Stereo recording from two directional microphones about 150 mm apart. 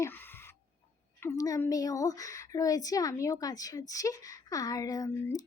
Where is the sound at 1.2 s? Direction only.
20° left (ahead or behind).